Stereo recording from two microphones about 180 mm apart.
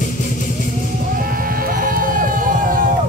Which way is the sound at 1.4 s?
50° right (ahead or behind).